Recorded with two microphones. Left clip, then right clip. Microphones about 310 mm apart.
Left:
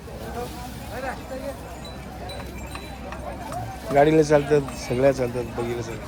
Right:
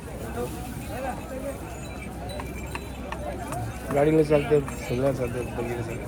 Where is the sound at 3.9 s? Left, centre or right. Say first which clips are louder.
Left 4 dB; left.